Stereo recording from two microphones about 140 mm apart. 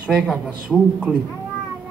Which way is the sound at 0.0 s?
5° right (ahead or behind).